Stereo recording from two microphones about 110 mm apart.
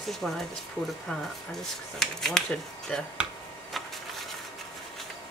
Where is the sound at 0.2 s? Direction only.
Centre (ahead or behind).